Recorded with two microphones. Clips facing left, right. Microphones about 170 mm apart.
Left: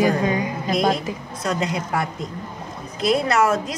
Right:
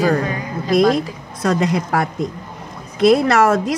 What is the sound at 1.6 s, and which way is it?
A woman's voice, 70° right (ahead or behind).